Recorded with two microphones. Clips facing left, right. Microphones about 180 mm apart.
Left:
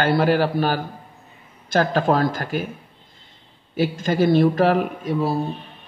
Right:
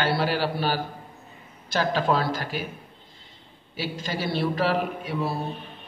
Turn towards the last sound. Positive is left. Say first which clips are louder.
# left 6 dB
turn(degrees=40)  # may be behind; listen again after turning